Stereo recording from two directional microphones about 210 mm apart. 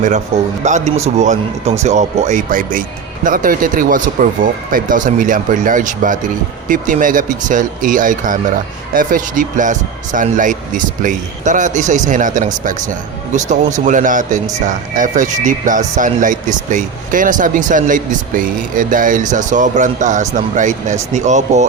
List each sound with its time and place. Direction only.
0.6 s speech: 35° right (ahead or behind)